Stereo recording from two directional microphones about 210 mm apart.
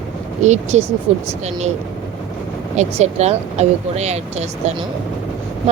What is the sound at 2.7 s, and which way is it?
Speech, 30° right (ahead or behind).